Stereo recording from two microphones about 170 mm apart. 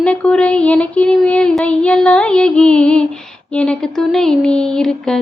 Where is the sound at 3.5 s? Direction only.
5° left (ahead or behind).